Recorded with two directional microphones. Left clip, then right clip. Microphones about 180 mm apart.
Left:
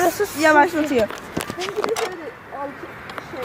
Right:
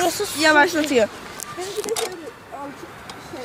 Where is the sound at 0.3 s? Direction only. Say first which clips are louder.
Left 1 dB; 20° left (ahead or behind).